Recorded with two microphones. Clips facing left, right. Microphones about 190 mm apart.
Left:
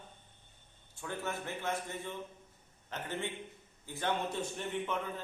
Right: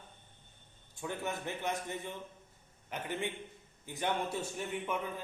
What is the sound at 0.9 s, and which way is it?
A man's voice, 15° right (ahead or behind).